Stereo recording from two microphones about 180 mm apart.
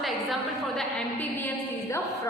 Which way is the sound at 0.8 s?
10° left (ahead or behind).